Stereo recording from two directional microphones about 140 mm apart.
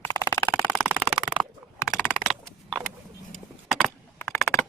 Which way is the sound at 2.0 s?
Centre (ahead or behind).